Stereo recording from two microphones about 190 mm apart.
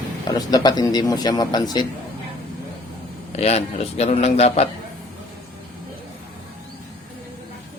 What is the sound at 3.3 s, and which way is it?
Speech, 35° left (ahead or behind).